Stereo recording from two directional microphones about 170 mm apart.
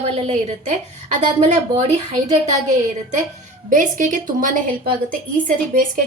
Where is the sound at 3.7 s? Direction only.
50° right (ahead or behind).